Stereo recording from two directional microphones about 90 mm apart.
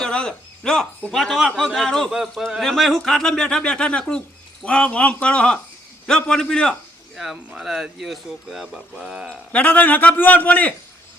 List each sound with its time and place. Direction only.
0.0 s a man's voice: 10° left (ahead or behind)
7.2 s speech: 5° right (ahead or behind)
9.0 s speech: 10° right (ahead or behind)
9.5 s a man's voice: 15° left (ahead or behind)